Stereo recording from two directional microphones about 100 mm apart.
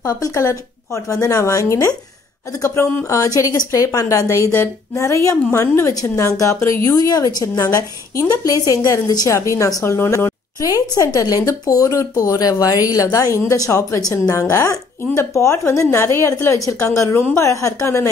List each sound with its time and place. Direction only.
0.0 s a woman's voice: 35° left (ahead or behind)